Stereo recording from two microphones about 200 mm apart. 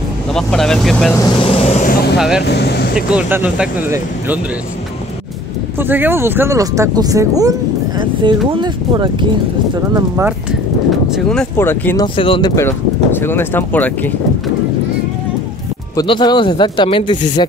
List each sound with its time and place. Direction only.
0.3 s speech: 5° left (ahead or behind)
1.4 s vehicle: 30° left (ahead or behind)
2.1 s speech: 5° right (ahead or behind)
2.4 s speech: 55° left (ahead or behind)
3.1 s speech: 10° right (ahead or behind)
5.8 s speech: 10° right (ahead or behind)
10.9 s speech: centre (ahead or behind)
12.2 s speech: 25° left (ahead or behind); by 14.1 s 10° left (ahead or behind)
16.0 s speech: 20° left (ahead or behind)